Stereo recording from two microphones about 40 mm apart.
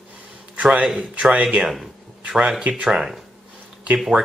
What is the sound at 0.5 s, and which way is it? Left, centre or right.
A man's voice, right.